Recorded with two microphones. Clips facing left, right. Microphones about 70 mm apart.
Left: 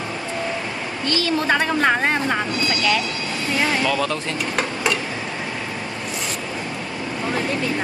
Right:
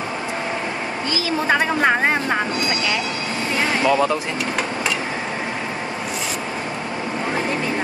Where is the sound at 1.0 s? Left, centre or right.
Centre.